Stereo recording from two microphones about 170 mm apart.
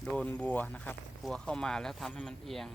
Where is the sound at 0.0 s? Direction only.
5° left (ahead or behind).